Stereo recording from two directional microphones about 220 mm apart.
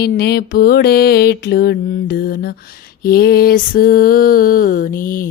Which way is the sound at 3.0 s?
45° left (ahead or behind).